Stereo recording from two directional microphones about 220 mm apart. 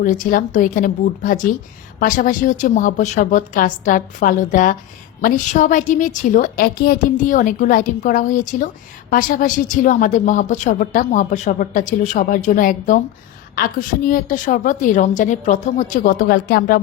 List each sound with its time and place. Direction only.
0.0 s a woman's voice: 35° left (ahead or behind)